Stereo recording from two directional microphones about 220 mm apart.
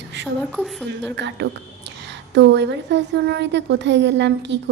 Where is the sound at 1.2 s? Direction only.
55° right (ahead or behind).